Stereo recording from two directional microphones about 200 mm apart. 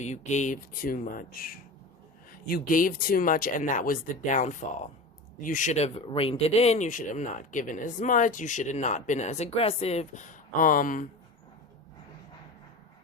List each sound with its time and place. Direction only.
0.0 s speech: 35° left (ahead or behind)